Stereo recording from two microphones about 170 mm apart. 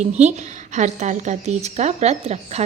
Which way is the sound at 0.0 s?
45° right (ahead or behind).